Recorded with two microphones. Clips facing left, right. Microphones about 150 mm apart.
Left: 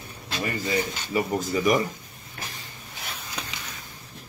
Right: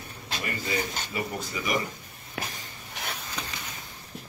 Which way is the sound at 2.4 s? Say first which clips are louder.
Right 4 dB; 90° right.